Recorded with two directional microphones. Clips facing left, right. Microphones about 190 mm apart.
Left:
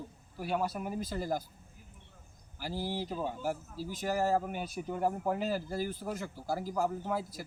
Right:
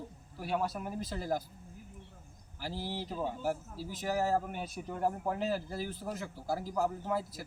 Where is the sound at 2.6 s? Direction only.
Centre (ahead or behind).